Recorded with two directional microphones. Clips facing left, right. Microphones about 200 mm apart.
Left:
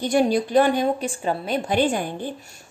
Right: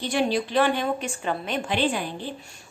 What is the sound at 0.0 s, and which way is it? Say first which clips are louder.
A woman's voice: left 5 dB; 45° left (ahead or behind).